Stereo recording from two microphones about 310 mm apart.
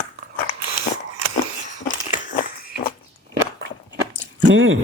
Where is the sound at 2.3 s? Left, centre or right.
Left.